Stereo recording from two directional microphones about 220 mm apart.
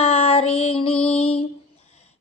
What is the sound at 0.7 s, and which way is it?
Music, 25° left (ahead or behind).